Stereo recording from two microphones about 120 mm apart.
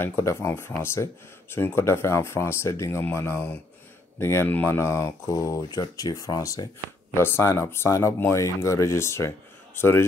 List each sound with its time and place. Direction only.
0.0 s speech: 20° left (ahead or behind)